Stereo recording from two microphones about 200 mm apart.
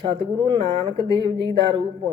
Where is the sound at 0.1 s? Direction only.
20° right (ahead or behind).